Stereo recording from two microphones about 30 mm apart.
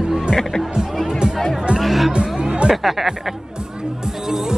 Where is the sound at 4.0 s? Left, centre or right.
Centre.